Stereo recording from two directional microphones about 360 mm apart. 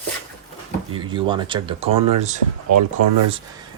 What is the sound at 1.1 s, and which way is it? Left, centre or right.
Speech, centre.